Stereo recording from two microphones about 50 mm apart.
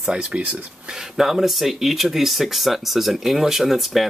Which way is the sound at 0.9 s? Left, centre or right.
Centre.